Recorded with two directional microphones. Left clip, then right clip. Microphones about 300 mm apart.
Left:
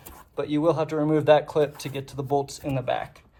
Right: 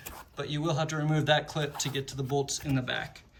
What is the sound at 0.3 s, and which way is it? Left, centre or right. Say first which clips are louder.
A man's voice: left 9 dB; centre.